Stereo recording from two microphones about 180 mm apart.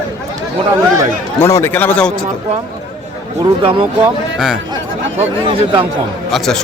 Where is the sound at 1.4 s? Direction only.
15° left (ahead or behind).